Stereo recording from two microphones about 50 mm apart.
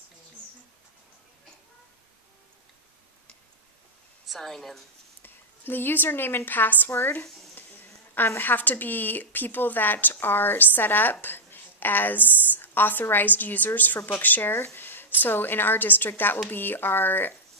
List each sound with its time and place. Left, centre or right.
4.3 s a woman's voice: centre
5.2 s a woman's voice: left
7.1 s a sound: left
8.4 s speech: left
14.5 s a sound: left
15.1 s a woman's voice: left